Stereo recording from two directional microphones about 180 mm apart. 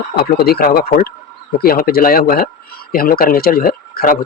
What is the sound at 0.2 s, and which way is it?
Speech, 60° left (ahead or behind).